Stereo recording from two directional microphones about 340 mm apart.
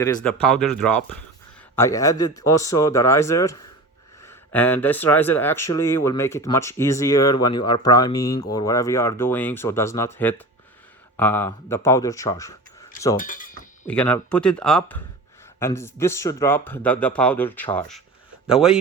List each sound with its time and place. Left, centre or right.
0.0 s speech: centre
13.1 s a sound: left
13.8 s speech: centre